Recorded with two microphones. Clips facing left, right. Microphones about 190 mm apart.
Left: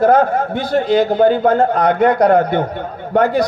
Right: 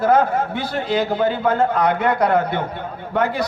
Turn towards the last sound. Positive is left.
turn(degrees=45)  # may be behind; listen again after turning